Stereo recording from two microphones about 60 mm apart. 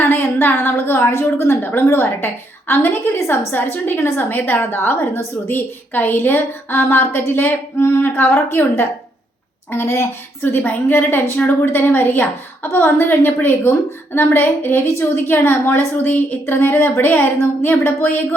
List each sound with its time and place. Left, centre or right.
0.0 s a woman's voice: left
7.8 s a sound: left
8.3 s a woman's voice: left